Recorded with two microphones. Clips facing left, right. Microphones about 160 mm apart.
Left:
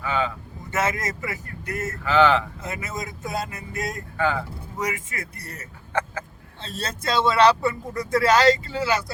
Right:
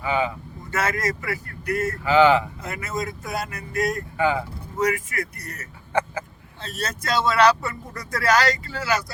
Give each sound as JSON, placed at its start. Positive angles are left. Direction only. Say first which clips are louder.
{"t": 0.0, "sound": "speech", "louder": "right 2 dB", "side_deg": -15}
{"t": 0.7, "sound": "speech", "louder": "right 1 dB", "side_deg": 20}
{"t": 2.0, "sound": "speech", "louder": "right 2 dB", "side_deg": -10}
{"t": 2.6, "sound": "speech", "louder": "right 3 dB", "side_deg": 20}
{"t": 5.9, "sound": "speech", "louder": "right 3 dB", "side_deg": -10}
{"t": 6.6, "sound": "speech", "louder": "right 2 dB", "side_deg": 25}